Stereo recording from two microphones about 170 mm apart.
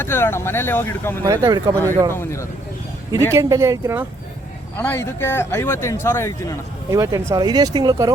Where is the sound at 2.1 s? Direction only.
15° left (ahead or behind).